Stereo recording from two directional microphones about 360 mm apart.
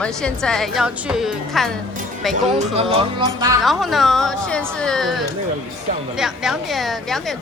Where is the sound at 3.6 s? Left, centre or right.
Centre.